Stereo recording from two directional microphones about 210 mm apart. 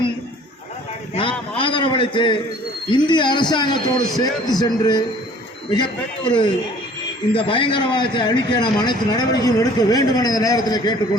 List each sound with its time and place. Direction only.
1.1 s a man's voice: 25° left (ahead or behind)